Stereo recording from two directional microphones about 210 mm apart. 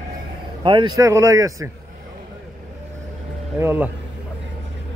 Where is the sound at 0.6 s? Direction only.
20° right (ahead or behind).